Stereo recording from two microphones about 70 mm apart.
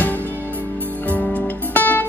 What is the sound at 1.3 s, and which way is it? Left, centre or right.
Music, left.